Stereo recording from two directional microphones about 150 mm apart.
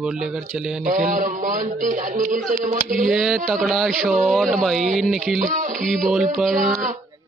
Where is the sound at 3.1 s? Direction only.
5° right (ahead or behind).